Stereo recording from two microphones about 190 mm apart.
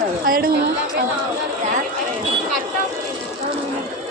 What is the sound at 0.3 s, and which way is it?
Speech, 50° right (ahead or behind).